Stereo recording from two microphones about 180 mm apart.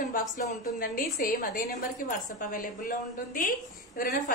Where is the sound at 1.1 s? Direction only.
50° left (ahead or behind).